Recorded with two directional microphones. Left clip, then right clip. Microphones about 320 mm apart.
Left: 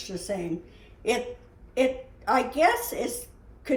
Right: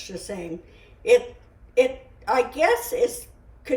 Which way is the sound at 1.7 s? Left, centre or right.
Centre.